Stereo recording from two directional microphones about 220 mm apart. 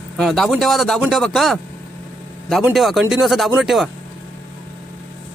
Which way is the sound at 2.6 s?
Centre (ahead or behind).